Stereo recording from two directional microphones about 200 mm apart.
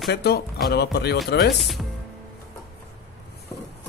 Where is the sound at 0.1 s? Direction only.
55° left (ahead or behind).